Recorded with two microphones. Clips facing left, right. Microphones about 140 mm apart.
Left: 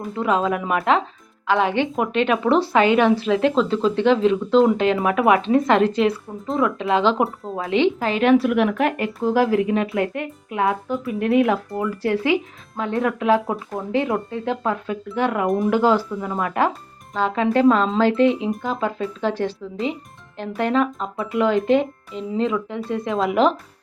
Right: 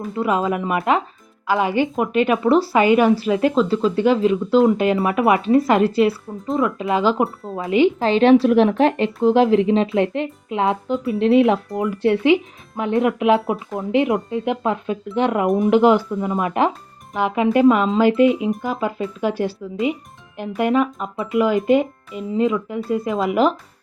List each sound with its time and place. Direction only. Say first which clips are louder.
0.0 s a woman's voice: right 1 dB; 5° right (ahead or behind)
7.9 s a woman's voice: right 4 dB; 30° right (ahead or behind); by 23.5 s 5° right (ahead or behind)